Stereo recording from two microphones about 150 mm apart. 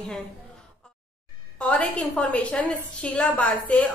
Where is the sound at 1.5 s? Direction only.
10° left (ahead or behind).